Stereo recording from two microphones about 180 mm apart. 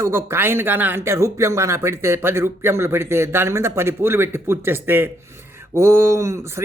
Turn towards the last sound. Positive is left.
turn(degrees=-15)  # may be behind; listen again after turning